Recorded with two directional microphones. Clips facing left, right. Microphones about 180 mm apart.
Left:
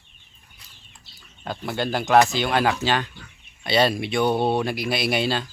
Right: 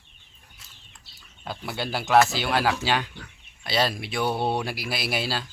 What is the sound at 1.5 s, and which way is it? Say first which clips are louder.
Speech: left 5 dB; 5° right (ahead or behind).